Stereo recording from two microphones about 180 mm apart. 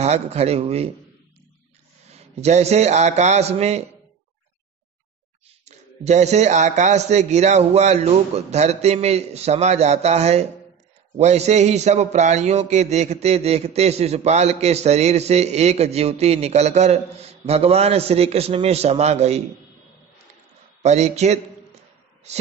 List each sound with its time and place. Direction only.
0.0 s a man's voice: 35° right (ahead or behind)
2.0 s a man's voice: 35° right (ahead or behind)
5.7 s a man's voice: 40° right (ahead or behind)
20.8 s a man's voice: 40° right (ahead or behind)